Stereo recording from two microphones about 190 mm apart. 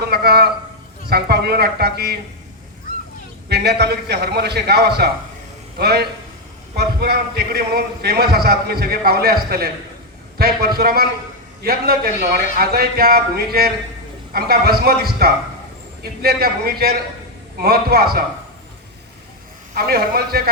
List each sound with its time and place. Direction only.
0.0 s a man's voice: 55° right (ahead or behind)
3.5 s a man's voice: 60° right (ahead or behind)
19.7 s speech: 55° right (ahead or behind)